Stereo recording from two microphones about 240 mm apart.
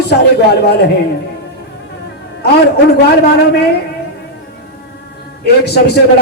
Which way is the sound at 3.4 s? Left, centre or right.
Left.